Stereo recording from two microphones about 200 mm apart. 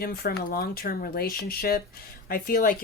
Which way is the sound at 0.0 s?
50° left (ahead or behind).